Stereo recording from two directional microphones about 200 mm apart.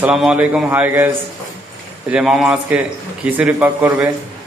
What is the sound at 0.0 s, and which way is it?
A man's voice, 5° right (ahead or behind).